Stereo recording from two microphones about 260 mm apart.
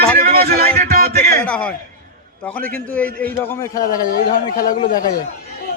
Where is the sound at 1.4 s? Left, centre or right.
Centre.